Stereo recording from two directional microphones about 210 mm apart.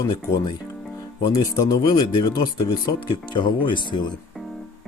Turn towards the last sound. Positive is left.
turn(degrees=20)  # may be behind; listen again after turning